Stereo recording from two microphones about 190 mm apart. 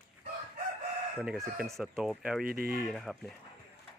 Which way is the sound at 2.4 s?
50° right (ahead or behind).